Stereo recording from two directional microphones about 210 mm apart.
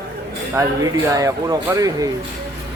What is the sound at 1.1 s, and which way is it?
Speech, 15° right (ahead or behind).